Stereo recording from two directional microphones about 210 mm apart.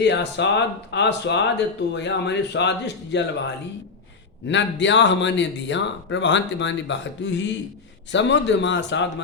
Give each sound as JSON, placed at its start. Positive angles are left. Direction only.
{"t": 0.0, "sound": "speech", "side_deg": 55}